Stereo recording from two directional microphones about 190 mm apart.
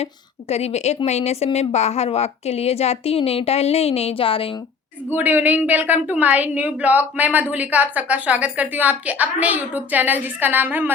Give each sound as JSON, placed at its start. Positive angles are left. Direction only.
{"t": 0.0, "sound": "a woman's voice", "side_deg": 35}
{"t": 5.1, "sound": "a woman's voice", "side_deg": -10}